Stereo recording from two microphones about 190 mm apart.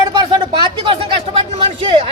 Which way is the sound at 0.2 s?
25° right (ahead or behind).